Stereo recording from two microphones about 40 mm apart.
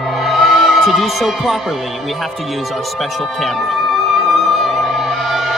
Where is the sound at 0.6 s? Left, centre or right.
Centre.